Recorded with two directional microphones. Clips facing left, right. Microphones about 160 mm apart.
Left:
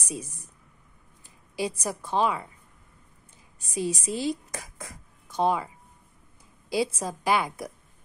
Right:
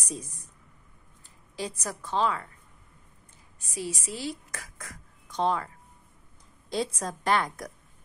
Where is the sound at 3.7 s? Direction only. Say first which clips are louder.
Left 6 dB; 20° left (ahead or behind).